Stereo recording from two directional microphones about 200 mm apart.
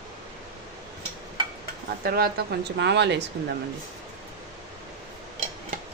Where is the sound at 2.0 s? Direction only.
50° right (ahead or behind).